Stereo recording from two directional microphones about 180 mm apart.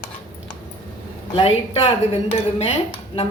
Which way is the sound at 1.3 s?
30° left (ahead or behind).